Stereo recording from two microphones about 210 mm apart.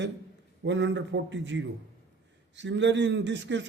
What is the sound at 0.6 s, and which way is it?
A man's voice, 60° right (ahead or behind).